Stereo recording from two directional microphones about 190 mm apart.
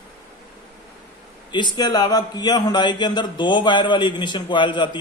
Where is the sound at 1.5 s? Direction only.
25° left (ahead or behind).